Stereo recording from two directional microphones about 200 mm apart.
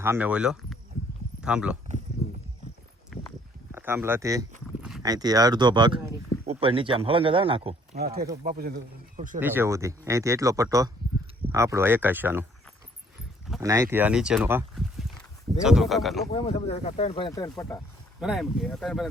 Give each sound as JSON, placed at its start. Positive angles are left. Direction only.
{"t": 0.0, "sound": "speech", "side_deg": -10}
{"t": 3.1, "sound": "walk", "side_deg": 0}
{"t": 3.7, "sound": "speech", "side_deg": -10}
{"t": 4.8, "sound": "horse", "side_deg": 0}
{"t": 5.0, "sound": "speech", "side_deg": -20}
{"t": 7.9, "sound": "speech", "side_deg": -50}
{"t": 9.4, "sound": "speech", "side_deg": -10}
{"t": 13.6, "sound": "speech", "side_deg": -15}
{"t": 14.8, "sound": "a sound", "side_deg": 0}
{"t": 15.6, "sound": "speech", "side_deg": 0}
{"t": 16.3, "sound": "speech", "side_deg": 30}
{"t": 18.2, "sound": "speech", "side_deg": 0}